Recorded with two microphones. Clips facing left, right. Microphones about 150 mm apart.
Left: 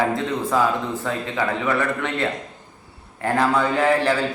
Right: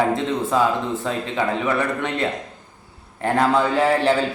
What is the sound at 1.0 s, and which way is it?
A man's voice, 20° right (ahead or behind).